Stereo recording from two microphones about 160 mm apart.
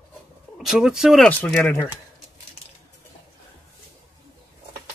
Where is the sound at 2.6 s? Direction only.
40° left (ahead or behind).